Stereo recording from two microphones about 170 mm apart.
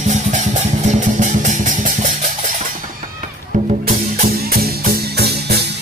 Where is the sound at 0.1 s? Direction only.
45° right (ahead or behind).